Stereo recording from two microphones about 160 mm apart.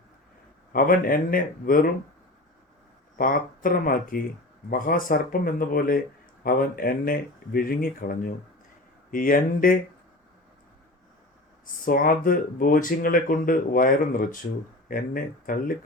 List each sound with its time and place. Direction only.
0.7 s speech: 60° left (ahead or behind)
3.2 s speech: 60° left (ahead or behind)
11.6 s speech: 60° left (ahead or behind)